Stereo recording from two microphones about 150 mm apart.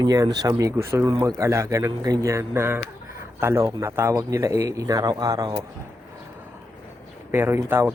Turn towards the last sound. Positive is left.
turn(degrees=-15)  # may be behind; listen again after turning